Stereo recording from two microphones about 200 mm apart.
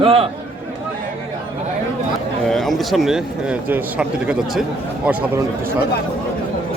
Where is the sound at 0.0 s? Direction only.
30° right (ahead or behind).